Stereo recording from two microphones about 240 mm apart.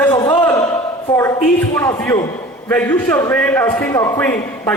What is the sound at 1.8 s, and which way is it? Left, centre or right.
A man's voice, centre.